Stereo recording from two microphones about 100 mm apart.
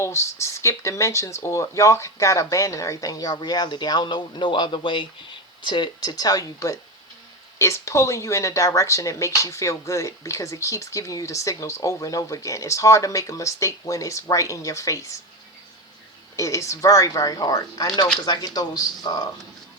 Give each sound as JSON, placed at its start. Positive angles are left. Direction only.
{"t": 0.0, "sound": "speech", "side_deg": 30}
{"t": 16.3, "sound": "speech", "side_deg": 30}